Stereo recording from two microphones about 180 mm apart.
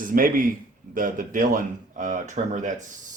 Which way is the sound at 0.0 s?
50° right (ahead or behind).